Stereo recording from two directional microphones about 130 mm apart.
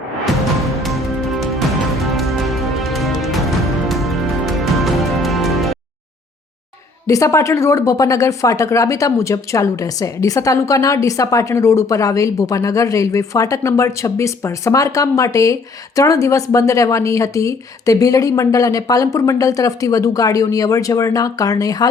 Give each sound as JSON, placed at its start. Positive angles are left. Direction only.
{"t": 0.8, "sound": "music", "side_deg": 0}
{"t": 7.1, "sound": "speech", "side_deg": 25}